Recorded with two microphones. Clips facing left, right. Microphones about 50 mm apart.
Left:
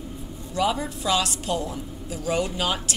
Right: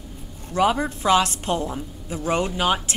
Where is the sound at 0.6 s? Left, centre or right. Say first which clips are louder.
Right 4 dB; right.